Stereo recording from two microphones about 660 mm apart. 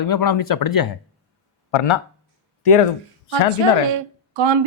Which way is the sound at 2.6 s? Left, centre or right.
Left.